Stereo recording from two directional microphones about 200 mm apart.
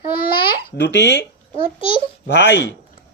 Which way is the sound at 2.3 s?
60° left (ahead or behind).